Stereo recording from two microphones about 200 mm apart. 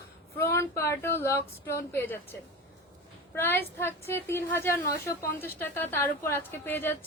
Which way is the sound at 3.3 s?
10° left (ahead or behind).